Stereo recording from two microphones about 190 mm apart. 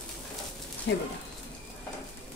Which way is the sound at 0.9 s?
65° left (ahead or behind).